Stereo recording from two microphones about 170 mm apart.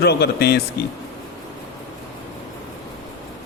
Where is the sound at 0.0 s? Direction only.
75° left (ahead or behind).